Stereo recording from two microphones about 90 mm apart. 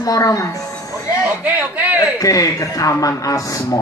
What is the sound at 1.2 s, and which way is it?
Speech, 15° right (ahead or behind).